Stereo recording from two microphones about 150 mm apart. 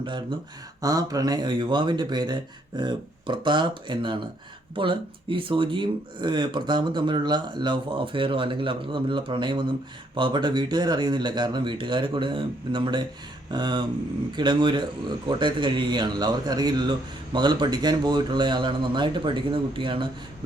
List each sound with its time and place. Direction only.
0.0 s speech: 30° right (ahead or behind)